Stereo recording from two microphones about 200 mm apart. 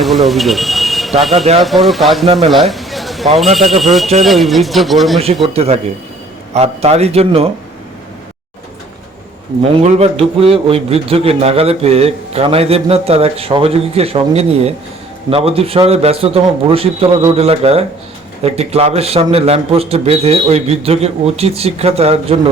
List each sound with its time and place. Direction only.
0.0 s speech: centre (ahead or behind)
2.5 s a sound: centre (ahead or behind)
3.3 s speech: centre (ahead or behind)
5.5 s a man's voice: 30° right (ahead or behind)
9.7 s a man's voice: 30° right (ahead or behind)